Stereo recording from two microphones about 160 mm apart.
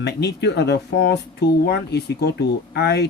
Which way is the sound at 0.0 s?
90° left.